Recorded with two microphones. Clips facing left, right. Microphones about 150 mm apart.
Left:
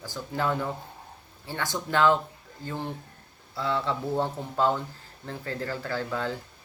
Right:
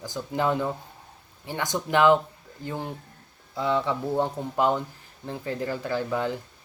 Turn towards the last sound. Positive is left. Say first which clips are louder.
# right 3 dB
turn(degrees=-15)  # may be behind; listen again after turning